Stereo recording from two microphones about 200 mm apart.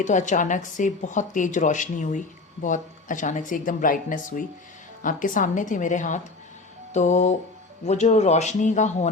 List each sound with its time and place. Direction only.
0.0 s a woman's voice: 40° left (ahead or behind)